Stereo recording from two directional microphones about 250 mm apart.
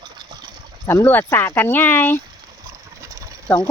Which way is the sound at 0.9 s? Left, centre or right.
Centre.